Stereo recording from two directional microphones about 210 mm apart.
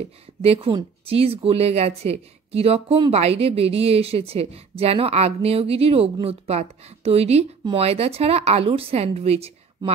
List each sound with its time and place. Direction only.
0.4 s speech: 30° right (ahead or behind)